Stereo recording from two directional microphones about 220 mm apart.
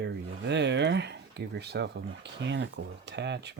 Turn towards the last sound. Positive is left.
turn(degrees=-50)  # may be behind; listen again after turning